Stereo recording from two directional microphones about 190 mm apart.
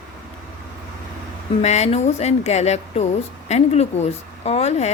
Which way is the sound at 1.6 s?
35° left (ahead or behind).